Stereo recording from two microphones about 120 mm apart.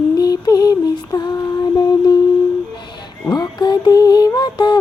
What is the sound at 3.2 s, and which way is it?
Music, 35° left (ahead or behind).